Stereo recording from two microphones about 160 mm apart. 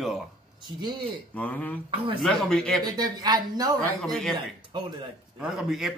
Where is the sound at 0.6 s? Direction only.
25° right (ahead or behind).